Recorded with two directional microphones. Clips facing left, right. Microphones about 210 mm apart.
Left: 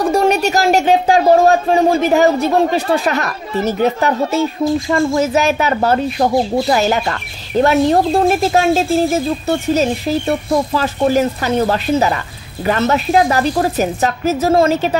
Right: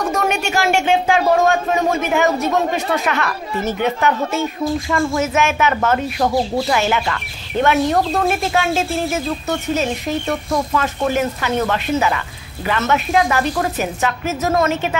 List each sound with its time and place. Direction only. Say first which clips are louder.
0.0 s speech: left 6 dB; 30° left (ahead or behind)